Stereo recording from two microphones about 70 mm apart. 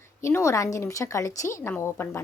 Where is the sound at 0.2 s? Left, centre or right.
Left.